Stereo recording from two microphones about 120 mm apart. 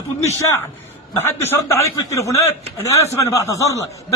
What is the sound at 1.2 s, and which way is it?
Speech, 20° left (ahead or behind).